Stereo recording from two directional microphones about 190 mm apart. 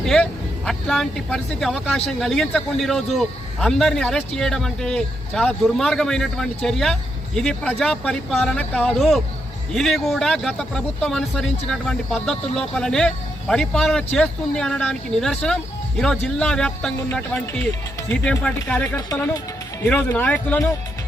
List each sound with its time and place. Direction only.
0.0 s speech: 5° left (ahead or behind)